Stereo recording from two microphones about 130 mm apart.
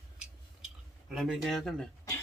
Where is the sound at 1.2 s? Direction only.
Centre (ahead or behind).